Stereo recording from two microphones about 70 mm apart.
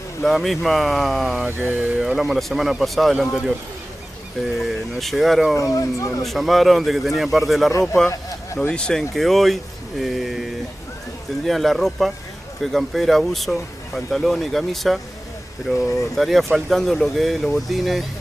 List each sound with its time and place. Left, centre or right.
0.2 s speech: centre
1.4 s mantra: right
2.0 s speech: centre
4.6 s speech: centre
5.6 s speech: left
6.2 s speech: centre
8.1 s a sound: left
8.7 s speech: centre
11.4 s speech: centre